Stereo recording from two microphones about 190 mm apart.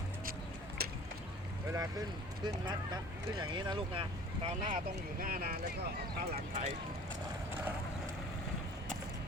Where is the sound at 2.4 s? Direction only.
20° right (ahead or behind).